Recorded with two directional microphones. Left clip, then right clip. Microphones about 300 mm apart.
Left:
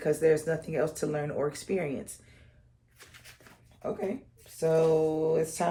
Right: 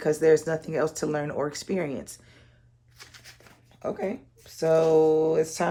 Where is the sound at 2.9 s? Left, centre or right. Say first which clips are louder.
Right 4 dB; centre.